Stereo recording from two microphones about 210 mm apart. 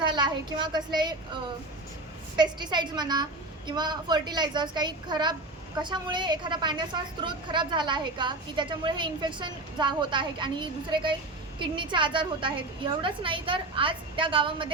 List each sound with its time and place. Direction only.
0.0 s a woman's voice: 20° right (ahead or behind)